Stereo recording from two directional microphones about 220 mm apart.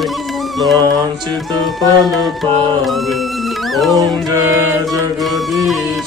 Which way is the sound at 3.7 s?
Centre (ahead or behind).